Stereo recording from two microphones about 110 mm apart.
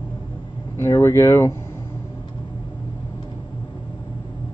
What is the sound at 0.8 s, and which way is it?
Speech, 25° left (ahead or behind).